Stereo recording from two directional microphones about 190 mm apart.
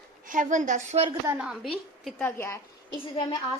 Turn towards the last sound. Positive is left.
turn(degrees=30)  # may be behind; listen again after turning